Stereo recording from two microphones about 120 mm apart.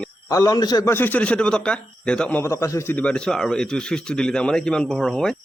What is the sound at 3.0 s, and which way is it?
Speech, 10° left (ahead or behind).